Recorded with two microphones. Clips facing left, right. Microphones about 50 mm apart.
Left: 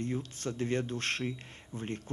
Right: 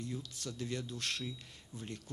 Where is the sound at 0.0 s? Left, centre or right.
Left.